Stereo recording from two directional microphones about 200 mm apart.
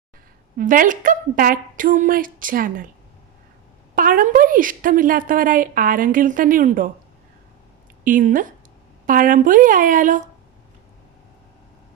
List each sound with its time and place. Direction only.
0.5 s a woman's voice: 40° right (ahead or behind)
3.9 s a woman's voice: 45° right (ahead or behind)
8.0 s a woman's voice: 40° right (ahead or behind)